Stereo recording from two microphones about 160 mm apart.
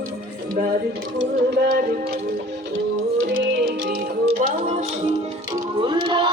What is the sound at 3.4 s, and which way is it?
Music, 65° right (ahead or behind).